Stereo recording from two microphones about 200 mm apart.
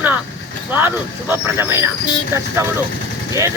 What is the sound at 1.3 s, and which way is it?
Speech, 10° right (ahead or behind).